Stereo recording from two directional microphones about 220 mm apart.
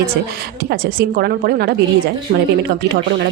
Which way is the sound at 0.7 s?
45° right (ahead or behind).